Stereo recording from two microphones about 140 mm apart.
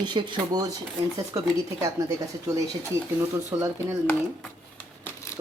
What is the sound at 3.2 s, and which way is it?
Speech, 20° right (ahead or behind).